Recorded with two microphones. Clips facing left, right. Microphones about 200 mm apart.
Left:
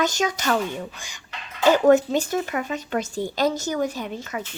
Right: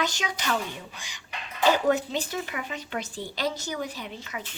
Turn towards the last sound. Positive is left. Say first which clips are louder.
# left 7 dB
turn(degrees=45)  # may be behind; listen again after turning